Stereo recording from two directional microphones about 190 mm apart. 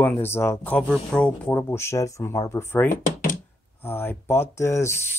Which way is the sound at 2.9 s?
45° left (ahead or behind).